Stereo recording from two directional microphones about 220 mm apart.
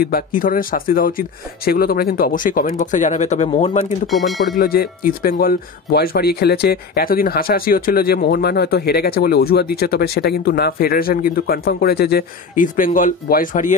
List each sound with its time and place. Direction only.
0.0 s speech: 40° left (ahead or behind)
4.1 s speech: centre (ahead or behind)
4.6 s speech: 40° left (ahead or behind)